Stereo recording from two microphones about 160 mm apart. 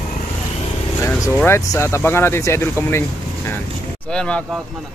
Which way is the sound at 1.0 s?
20° left (ahead or behind).